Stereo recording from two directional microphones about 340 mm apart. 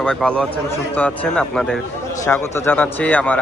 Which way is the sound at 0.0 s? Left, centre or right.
Centre.